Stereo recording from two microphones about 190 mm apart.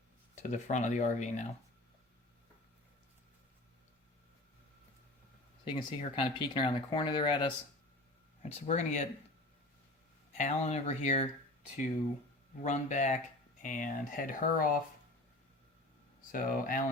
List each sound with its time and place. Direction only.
0.5 s speech: 40° left (ahead or behind)
5.6 s speech: 25° left (ahead or behind)
8.4 s speech: 35° left (ahead or behind)
10.3 s speech: 35° left (ahead or behind)
12.6 s speech: 40° left (ahead or behind)
16.3 s speech: 45° left (ahead or behind)